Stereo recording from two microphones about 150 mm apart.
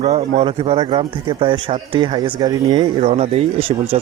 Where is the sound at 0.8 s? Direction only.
30° right (ahead or behind).